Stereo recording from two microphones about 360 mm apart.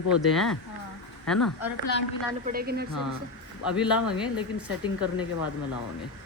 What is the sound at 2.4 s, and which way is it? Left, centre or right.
Speech, right.